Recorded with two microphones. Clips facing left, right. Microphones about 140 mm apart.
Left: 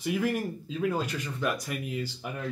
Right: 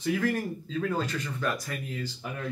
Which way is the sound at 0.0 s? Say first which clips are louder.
Right 1 dB; 10° left (ahead or behind).